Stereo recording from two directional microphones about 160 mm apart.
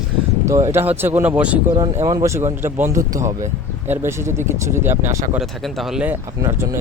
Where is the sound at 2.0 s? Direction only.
20° right (ahead or behind).